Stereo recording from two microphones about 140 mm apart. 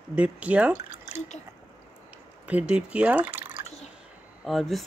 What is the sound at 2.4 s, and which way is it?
Speech, 10° right (ahead or behind).